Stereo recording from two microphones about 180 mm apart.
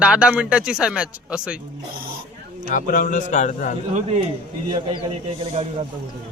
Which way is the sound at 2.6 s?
50° left (ahead or behind).